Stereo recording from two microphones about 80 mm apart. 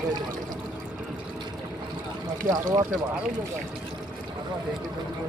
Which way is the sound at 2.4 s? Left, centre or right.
Right.